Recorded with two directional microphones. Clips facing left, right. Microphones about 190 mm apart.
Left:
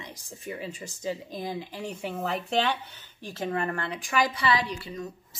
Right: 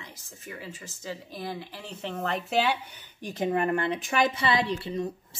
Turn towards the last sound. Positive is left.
turn(degrees=-25)  # may be behind; listen again after turning